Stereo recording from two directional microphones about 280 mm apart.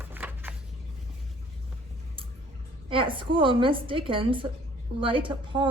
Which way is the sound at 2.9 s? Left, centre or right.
Centre.